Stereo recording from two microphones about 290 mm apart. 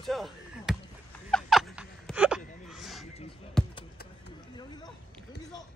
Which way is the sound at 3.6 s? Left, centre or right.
Centre.